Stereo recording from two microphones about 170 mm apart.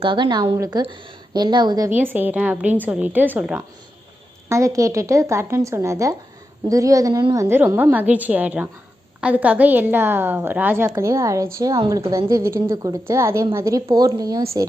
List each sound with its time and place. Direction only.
0.0 s a woman's voice: 30° right (ahead or behind)
1.9 s a woman's voice: 10° right (ahead or behind)
7.4 s a woman's voice: 15° right (ahead or behind)